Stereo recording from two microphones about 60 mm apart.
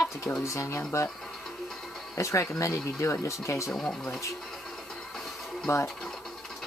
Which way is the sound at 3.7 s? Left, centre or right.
Centre.